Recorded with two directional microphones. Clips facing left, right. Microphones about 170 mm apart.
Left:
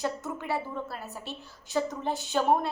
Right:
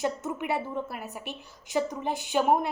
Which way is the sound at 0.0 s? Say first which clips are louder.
Right 2 dB; 20° right (ahead or behind).